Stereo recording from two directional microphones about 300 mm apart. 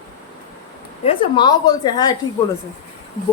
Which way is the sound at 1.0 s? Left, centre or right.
Centre.